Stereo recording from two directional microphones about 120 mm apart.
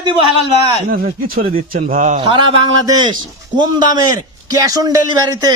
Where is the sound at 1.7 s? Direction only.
90° right.